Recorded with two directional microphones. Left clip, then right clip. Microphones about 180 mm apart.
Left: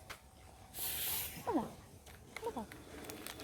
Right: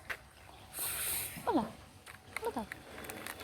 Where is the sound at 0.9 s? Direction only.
10° left (ahead or behind).